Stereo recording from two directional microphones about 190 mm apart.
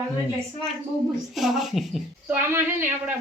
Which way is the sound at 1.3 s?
Centre (ahead or behind).